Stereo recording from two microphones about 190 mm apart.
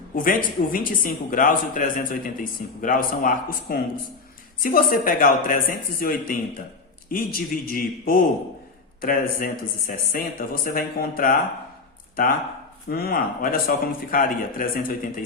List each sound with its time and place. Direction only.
0.2 s speech: 45° left (ahead or behind)
12.9 s speech: 50° left (ahead or behind)